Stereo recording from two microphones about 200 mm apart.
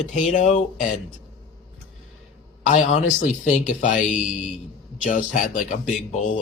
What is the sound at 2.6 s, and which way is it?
Speech, 35° left (ahead or behind).